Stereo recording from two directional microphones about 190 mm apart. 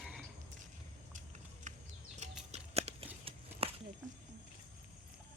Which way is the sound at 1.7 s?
40° right (ahead or behind).